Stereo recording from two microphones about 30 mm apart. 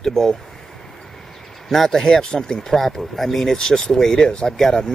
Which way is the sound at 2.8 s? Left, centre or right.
Centre.